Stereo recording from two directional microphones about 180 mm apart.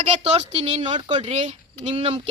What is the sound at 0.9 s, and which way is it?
Speech, 25° right (ahead or behind).